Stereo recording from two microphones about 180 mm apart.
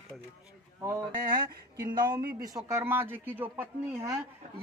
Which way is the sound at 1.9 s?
25° right (ahead or behind).